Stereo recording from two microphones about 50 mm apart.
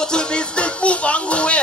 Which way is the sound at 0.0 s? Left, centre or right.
Centre.